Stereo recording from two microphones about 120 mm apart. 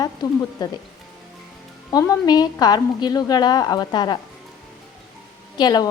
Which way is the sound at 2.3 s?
35° left (ahead or behind).